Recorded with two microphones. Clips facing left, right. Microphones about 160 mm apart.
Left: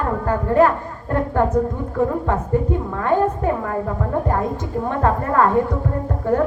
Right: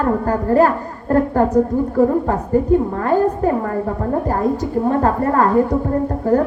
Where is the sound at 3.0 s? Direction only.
35° right (ahead or behind).